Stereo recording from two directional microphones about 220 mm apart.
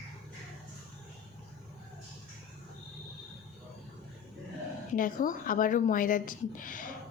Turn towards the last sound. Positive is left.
turn(degrees=40)  # may be behind; listen again after turning